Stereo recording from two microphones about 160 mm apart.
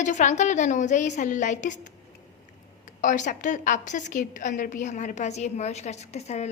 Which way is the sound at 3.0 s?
50° left (ahead or behind).